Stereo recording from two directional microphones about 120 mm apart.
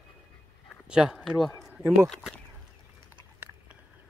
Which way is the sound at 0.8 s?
5° right (ahead or behind).